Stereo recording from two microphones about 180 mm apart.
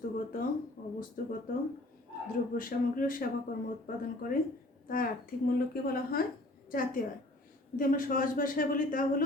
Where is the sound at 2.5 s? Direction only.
50° left (ahead or behind).